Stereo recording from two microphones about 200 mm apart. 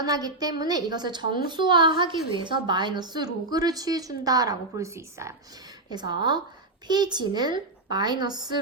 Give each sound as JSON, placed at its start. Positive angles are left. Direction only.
{"t": 0.0, "sound": "a woman's voice", "side_deg": -20}